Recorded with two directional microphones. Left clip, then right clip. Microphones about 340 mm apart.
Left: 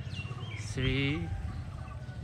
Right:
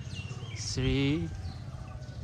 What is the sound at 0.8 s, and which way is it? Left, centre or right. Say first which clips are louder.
Speech: right 2 dB; centre.